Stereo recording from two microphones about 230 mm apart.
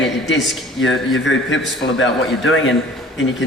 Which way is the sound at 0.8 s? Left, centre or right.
Left.